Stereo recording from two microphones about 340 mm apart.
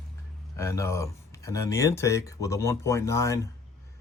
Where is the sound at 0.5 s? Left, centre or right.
Centre.